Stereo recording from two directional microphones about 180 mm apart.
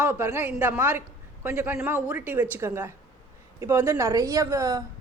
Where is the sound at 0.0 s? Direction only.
15° right (ahead or behind).